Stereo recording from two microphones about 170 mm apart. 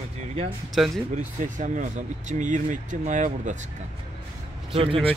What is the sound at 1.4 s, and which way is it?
Speech, 50° right (ahead or behind).